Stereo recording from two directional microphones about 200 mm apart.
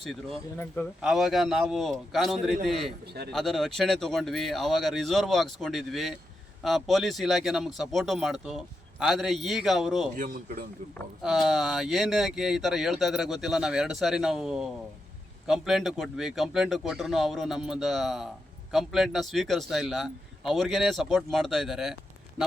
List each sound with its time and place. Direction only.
1.0 s speech: centre (ahead or behind)
10.2 s speech: 45° right (ahead or behind)
10.9 s speech: centre (ahead or behind)